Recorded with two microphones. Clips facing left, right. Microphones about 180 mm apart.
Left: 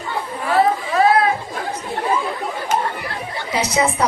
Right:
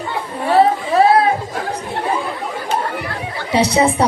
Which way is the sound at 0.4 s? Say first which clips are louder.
Right 4 dB; 30° right (ahead or behind).